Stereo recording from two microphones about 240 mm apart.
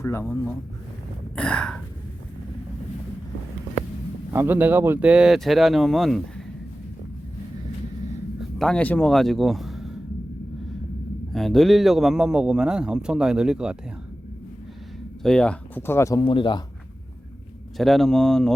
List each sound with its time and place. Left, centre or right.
0.0 s a man's voice: centre
4.3 s a man's voice: centre
8.4 s speech: centre
11.3 s a man's voice: centre
15.2 s speech: centre
17.7 s a man's voice: centre